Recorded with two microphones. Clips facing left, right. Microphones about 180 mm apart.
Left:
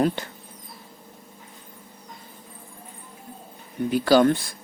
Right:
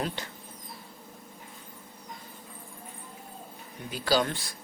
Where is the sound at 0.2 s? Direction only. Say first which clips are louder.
Left 5 dB; 55° left (ahead or behind).